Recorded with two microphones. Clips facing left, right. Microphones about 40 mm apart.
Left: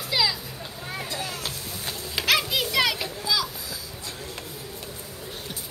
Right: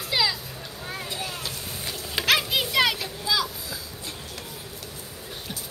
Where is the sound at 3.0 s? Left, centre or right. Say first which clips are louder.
Right 1 dB; centre.